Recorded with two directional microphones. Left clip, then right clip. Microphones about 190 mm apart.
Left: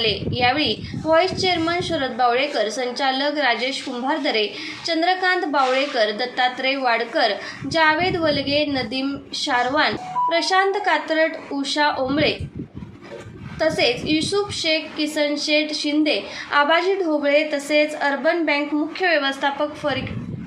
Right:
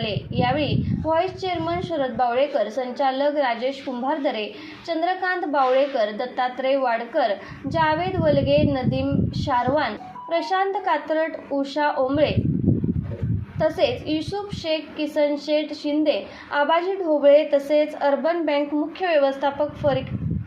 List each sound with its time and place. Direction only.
0.0 s a woman's voice: 20° right (ahead or behind)
13.6 s a woman's voice: 20° right (ahead or behind)